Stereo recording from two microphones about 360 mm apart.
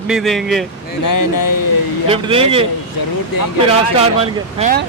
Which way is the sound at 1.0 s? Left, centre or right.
Left.